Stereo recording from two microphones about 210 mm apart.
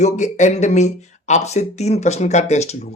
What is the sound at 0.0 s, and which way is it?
A man's voice, 35° left (ahead or behind).